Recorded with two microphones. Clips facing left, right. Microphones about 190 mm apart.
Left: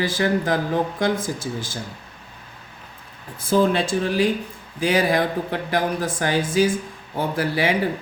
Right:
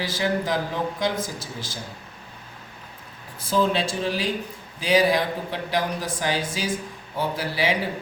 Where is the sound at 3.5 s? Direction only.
55° left (ahead or behind).